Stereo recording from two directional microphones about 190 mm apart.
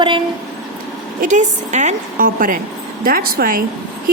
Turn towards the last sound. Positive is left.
turn(degrees=-50)  # may be behind; listen again after turning